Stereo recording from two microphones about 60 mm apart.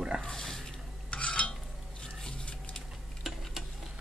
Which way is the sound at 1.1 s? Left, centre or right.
Centre.